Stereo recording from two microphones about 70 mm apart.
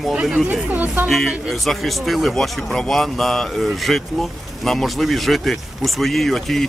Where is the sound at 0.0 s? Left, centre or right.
Centre.